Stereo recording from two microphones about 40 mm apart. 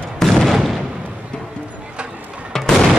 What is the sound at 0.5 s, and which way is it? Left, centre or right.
Artillery fire, centre.